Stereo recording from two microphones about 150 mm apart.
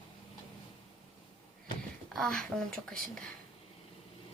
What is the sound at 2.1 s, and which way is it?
A woman's voice, 5° left (ahead or behind).